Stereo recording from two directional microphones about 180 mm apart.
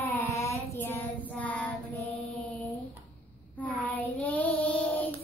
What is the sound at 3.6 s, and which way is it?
Child singing, 10° left (ahead or behind).